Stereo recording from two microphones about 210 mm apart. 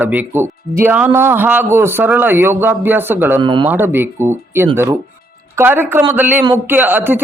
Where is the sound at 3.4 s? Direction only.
20° right (ahead or behind).